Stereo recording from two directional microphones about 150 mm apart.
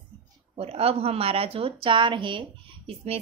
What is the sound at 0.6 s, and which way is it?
A woman's voice, 40° right (ahead or behind).